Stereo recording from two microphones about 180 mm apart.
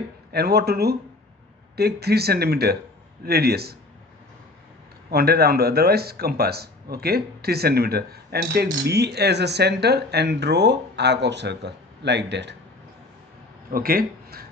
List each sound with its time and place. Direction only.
0.3 s speech: 60° right (ahead or behind)
5.1 s speech: 60° right (ahead or behind); by 12.5 s 75° right (ahead or behind)
13.7 s speech: 55° right (ahead or behind)